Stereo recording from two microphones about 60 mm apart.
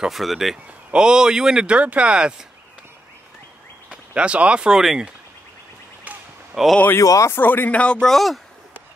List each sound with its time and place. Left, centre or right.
0.0 s speech: centre
0.9 s speech: centre
3.9 s speech: centre
6.1 s a sound: right
6.5 s speech: centre
7.0 s speech: left
7.2 s speech: left
7.7 s speech: centre
8.1 s speech: centre